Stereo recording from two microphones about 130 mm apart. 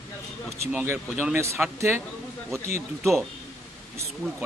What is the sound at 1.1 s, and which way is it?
Speech, 5° right (ahead or behind).